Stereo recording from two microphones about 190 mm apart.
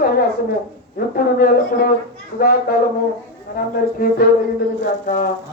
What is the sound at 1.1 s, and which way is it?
Speech, 50° left (ahead or behind).